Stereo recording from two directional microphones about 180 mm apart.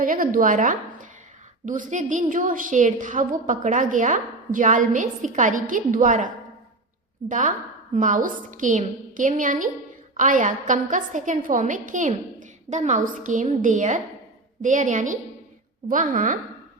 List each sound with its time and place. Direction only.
0.0 s a woman's voice: 50° right (ahead or behind)